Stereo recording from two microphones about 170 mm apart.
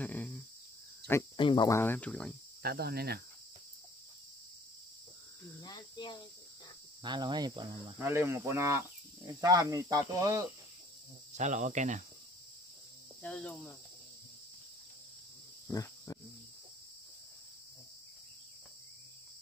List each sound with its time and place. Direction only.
0.0 s cricket: 10° left (ahead or behind)
1.3 s speech: 30° left (ahead or behind)
1.8 s speech: 10° left (ahead or behind)
2.6 s cricket: 65° right (ahead or behind)
5.6 s cricket: 25° left (ahead or behind)
7.0 s speech: 25° right (ahead or behind)
8.0 s speech: 15° right (ahead or behind)
11.3 s speech: 45° right (ahead or behind)
13.2 s cricket: 5° left (ahead or behind)
15.7 s cricket: 20° left (ahead or behind)